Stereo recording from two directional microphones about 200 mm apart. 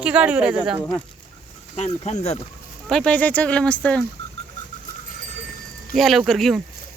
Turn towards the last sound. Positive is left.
turn(degrees=0)  # may be behind; listen again after turning